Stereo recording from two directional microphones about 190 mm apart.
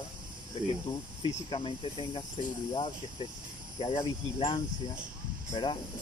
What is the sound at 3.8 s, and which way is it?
Speech, 25° left (ahead or behind).